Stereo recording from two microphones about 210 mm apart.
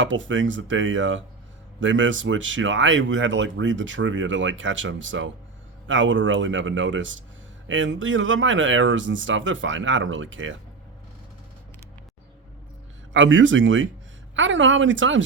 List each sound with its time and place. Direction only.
0.0 s speech: 65° right (ahead or behind)
13.1 s speech: 65° right (ahead or behind)